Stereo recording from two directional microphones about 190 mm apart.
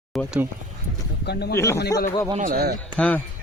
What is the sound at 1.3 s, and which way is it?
Speech, 60° left (ahead or behind).